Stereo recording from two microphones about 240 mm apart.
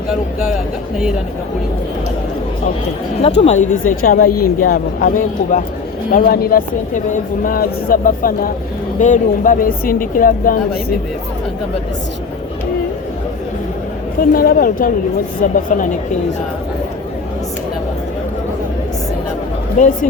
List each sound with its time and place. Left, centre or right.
0.1 s speech: centre
3.2 s speech: left
14.2 s speech: left
19.8 s speech: left